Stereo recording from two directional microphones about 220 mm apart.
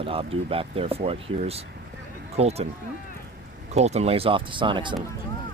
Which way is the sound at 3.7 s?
30° right (ahead or behind).